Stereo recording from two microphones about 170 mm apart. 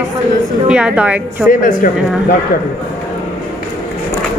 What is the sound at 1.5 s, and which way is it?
Speech, 55° left (ahead or behind).